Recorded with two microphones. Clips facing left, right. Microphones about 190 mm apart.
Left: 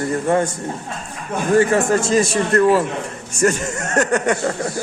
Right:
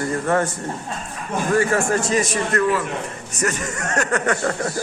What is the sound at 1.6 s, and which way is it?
A man's voice, 25° left (ahead or behind).